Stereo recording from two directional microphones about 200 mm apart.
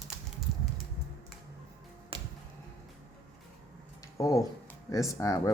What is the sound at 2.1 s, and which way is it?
Music, 25° right (ahead or behind).